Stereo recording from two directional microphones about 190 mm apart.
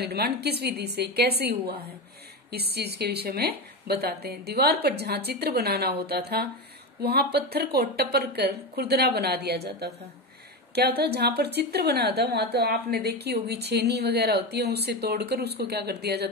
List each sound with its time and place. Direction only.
0.0 s a woman's voice: 60° right (ahead or behind)